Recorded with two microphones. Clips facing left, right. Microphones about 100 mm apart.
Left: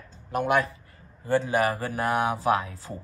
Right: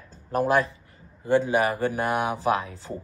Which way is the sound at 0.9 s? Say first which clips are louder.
Right 3 dB; 20° right (ahead or behind).